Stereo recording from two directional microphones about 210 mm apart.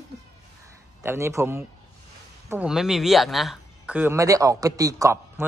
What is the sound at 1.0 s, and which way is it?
Speech, 10° right (ahead or behind).